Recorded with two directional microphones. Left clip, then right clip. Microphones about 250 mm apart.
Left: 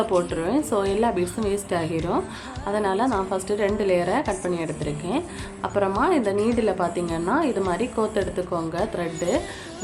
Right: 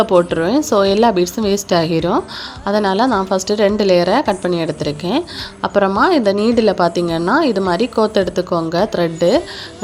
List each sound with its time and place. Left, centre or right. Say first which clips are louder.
0.0 s a woman's voice: right 10 dB; right